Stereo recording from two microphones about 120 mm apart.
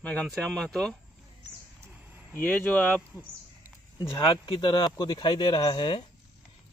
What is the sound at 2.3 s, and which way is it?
Speech, 15° left (ahead or behind).